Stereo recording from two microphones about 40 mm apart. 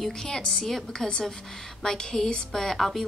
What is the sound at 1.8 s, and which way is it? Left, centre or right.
Speech, centre.